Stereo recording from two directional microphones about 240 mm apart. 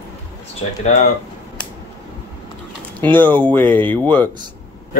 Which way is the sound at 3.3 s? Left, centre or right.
Centre.